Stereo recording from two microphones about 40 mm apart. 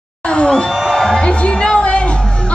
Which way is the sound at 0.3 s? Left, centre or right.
Left.